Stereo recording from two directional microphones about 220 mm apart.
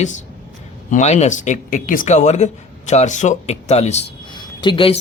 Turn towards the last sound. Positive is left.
turn(degrees=20)  # may be behind; listen again after turning